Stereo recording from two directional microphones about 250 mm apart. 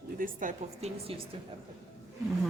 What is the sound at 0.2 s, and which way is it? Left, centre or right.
A woman's voice, right.